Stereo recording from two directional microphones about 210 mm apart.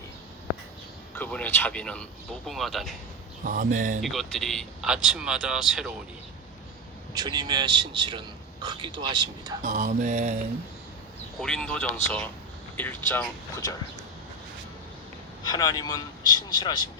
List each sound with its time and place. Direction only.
1.1 s speech: 10° left (ahead or behind)
3.4 s mantra: 40° right (ahead or behind)
4.0 s speech: centre (ahead or behind)
7.1 s speech: 20° right (ahead or behind)
9.6 s mantra: 35° right (ahead or behind)
11.3 s speech: 5° left (ahead or behind)
15.4 s a man's voice: 20° left (ahead or behind)